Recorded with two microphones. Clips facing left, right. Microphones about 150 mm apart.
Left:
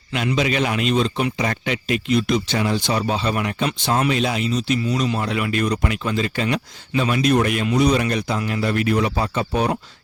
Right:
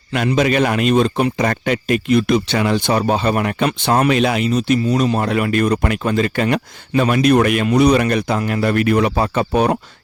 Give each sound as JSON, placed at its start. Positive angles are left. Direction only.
{"t": 0.3, "sound": "speech", "side_deg": -50}
{"t": 4.8, "sound": "speech", "side_deg": -40}